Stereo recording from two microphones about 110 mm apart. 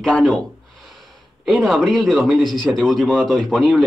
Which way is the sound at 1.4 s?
Centre (ahead or behind).